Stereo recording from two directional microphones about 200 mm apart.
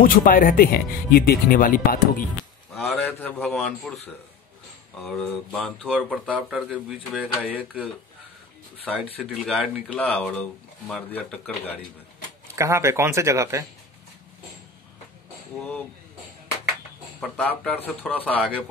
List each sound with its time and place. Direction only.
0.0 s speech: 45° left (ahead or behind)
2.7 s speech: centre (ahead or behind)
9.2 s speech: centre (ahead or behind)
12.5 s speech: 15° right (ahead or behind)
17.2 s speech: 5° left (ahead or behind)